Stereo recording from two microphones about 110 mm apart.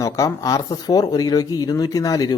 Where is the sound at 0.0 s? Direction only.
30° left (ahead or behind).